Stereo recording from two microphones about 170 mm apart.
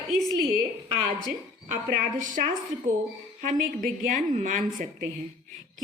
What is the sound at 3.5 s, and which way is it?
A woman's voice, 50° right (ahead or behind).